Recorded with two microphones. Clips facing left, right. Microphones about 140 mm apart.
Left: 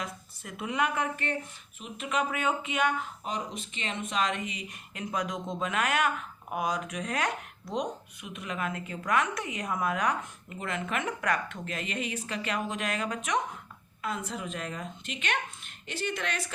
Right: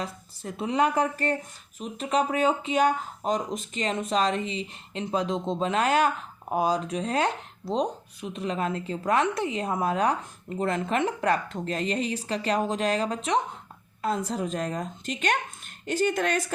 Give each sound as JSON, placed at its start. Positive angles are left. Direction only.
{"t": 0.0, "sound": "speech", "side_deg": -30}